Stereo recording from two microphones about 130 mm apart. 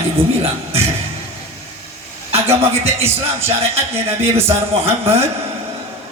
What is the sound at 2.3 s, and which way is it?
A man's voice, 50° right (ahead or behind).